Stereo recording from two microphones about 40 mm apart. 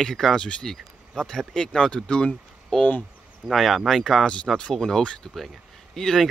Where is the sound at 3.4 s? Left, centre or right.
Centre.